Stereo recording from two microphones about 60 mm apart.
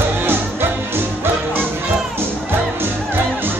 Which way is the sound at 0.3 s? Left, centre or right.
Right.